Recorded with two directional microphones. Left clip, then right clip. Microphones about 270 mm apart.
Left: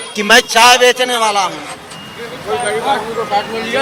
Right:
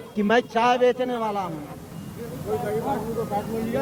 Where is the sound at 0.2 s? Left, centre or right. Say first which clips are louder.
Left 12 dB; centre.